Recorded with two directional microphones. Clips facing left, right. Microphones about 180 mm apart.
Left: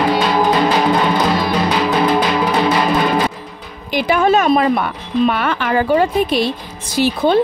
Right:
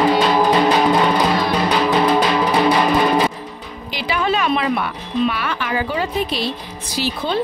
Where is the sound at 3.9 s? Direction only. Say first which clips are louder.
Left 7 dB; 50° left (ahead or behind).